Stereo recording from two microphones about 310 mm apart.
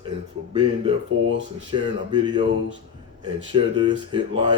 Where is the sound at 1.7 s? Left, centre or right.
Centre.